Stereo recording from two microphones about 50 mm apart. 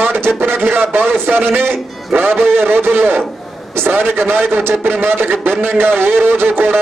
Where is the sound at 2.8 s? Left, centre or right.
Right.